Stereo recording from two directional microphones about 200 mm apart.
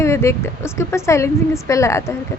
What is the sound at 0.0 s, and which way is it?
A woman's voice, 15° left (ahead or behind).